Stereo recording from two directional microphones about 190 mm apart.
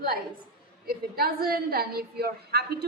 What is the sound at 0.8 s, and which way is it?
A woman's voice, 50° right (ahead or behind).